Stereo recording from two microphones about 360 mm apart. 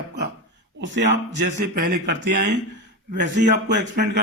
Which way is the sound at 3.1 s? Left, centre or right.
Right.